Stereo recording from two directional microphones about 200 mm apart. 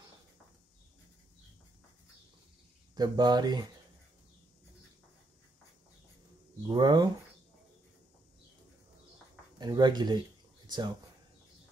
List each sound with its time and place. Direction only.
2.9 s speech: 20° right (ahead or behind)
6.7 s speech: 20° right (ahead or behind)
9.6 s speech: 20° right (ahead or behind)